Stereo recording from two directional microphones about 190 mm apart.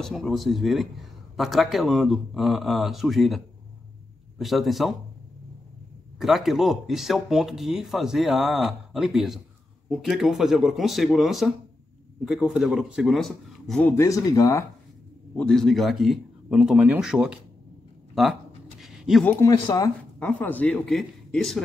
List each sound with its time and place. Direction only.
0.0 s a man's voice: centre (ahead or behind)
6.1 s a man's voice: centre (ahead or behind); by 14.6 s 20° left (ahead or behind)
15.3 s a man's voice: 5° left (ahead or behind)
18.8 s a sound: centre (ahead or behind)
19.4 s a man's voice: 20° left (ahead or behind); by 21.6 s 5° left (ahead or behind)